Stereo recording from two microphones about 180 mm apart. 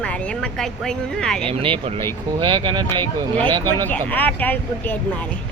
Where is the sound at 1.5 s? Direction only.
30° right (ahead or behind).